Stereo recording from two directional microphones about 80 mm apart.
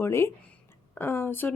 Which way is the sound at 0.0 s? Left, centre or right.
Left.